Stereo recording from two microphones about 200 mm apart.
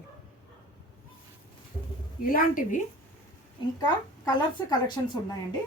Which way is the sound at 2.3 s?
45° left (ahead or behind).